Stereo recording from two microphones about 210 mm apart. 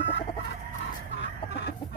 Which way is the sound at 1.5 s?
55° left (ahead or behind).